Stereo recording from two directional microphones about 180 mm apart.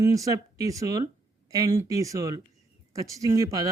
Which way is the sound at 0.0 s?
20° right (ahead or behind).